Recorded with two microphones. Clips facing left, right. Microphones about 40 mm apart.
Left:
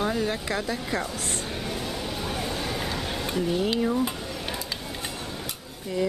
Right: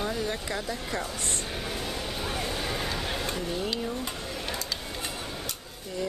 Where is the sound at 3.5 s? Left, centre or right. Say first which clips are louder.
Left 6 dB; centre.